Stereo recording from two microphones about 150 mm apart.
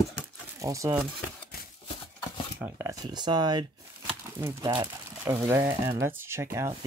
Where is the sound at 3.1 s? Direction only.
30° right (ahead or behind).